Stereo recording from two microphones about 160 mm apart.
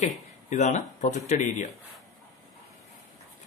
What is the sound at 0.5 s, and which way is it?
Speech, 50° left (ahead or behind).